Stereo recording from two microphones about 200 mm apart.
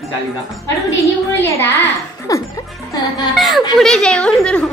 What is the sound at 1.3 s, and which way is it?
Speech, 10° left (ahead or behind).